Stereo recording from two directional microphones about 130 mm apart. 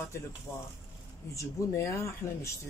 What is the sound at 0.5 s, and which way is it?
Speech, 25° left (ahead or behind).